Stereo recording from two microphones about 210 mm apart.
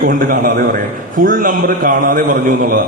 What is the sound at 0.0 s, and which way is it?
A man's voice, 40° right (ahead or behind).